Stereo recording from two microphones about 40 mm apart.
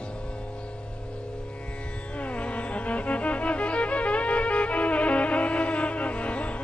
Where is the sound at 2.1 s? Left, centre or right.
Left.